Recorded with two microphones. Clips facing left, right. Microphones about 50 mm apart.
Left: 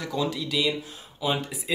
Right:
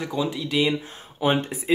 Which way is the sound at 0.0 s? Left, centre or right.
Right.